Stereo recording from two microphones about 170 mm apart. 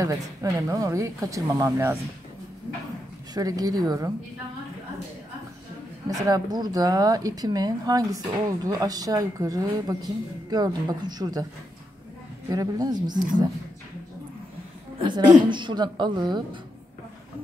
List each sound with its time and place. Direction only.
0.0 s a woman's voice: 20° right (ahead or behind)
3.3 s a woman's voice: 20° right (ahead or behind)
6.0 s a woman's voice: 20° right (ahead or behind)
12.4 s a woman's voice: 20° right (ahead or behind)
15.0 s a woman's voice: 25° right (ahead or behind)